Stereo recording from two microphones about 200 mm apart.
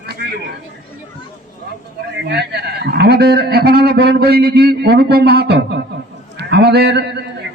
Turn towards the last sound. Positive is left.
turn(degrees=-55)  # may be behind; listen again after turning